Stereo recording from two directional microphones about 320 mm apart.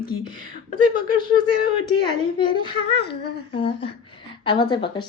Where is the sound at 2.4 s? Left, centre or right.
Centre.